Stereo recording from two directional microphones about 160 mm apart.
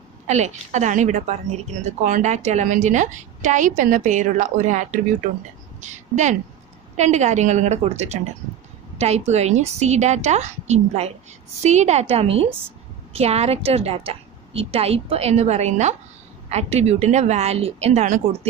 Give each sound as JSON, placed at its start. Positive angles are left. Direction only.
{"t": 0.3, "sound": "a woman's voice", "side_deg": -45}